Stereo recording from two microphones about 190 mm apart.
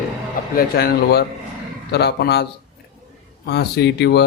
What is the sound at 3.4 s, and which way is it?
Speech, 60° left (ahead or behind).